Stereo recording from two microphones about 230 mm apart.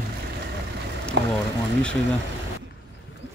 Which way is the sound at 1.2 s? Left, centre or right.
Right.